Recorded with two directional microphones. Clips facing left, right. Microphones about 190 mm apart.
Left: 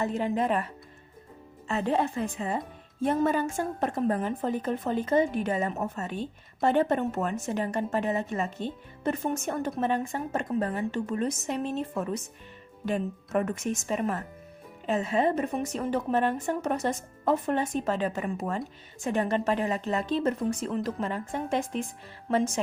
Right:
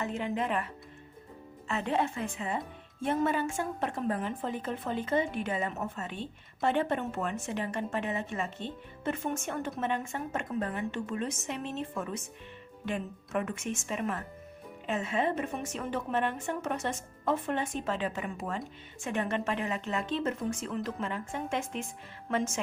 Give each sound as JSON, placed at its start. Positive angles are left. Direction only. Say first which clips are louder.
{"t": 0.0, "sound": "a woman's voice", "louder": "left 5 dB", "side_deg": 35}